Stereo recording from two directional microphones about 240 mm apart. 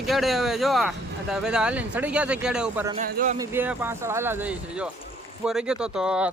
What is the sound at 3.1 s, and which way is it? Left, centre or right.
Speech, right.